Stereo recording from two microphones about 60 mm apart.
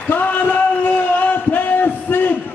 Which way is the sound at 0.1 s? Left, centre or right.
Left.